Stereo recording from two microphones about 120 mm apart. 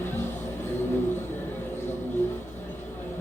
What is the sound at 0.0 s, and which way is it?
Music, 20° left (ahead or behind).